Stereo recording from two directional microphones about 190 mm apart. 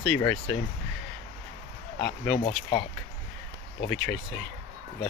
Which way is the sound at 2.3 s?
25° left (ahead or behind).